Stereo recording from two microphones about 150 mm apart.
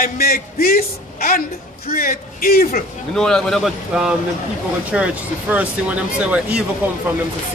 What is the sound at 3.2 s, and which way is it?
A man's voice, 5° left (ahead or behind).